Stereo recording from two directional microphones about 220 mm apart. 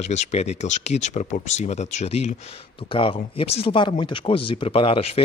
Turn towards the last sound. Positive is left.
turn(degrees=25)  # may be behind; listen again after turning